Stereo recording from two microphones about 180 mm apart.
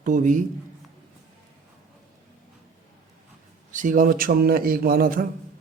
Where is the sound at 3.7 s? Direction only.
45° right (ahead or behind).